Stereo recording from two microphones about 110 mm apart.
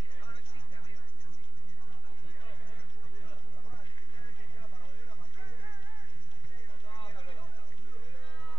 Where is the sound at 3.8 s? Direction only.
45° left (ahead or behind).